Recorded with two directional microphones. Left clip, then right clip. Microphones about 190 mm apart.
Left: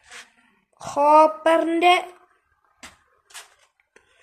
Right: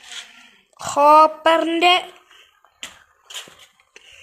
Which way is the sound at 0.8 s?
10° right (ahead or behind).